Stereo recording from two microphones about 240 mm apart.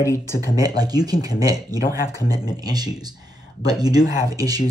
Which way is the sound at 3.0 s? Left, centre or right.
Centre.